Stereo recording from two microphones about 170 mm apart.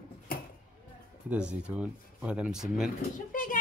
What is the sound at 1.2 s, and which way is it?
Speech, 5° right (ahead or behind).